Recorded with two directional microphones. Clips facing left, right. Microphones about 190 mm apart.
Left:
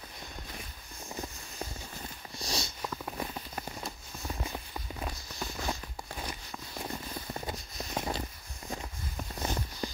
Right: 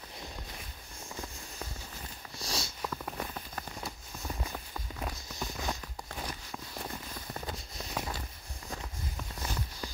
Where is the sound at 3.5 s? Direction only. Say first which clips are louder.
Left 2 dB; 15° left (ahead or behind).